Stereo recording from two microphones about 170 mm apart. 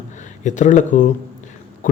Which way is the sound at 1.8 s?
50° left (ahead or behind).